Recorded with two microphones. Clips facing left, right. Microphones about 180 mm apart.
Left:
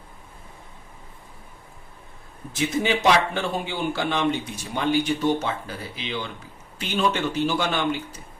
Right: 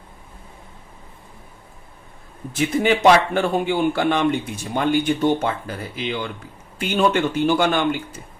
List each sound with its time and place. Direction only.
2.5 s a man's voice: 55° right (ahead or behind)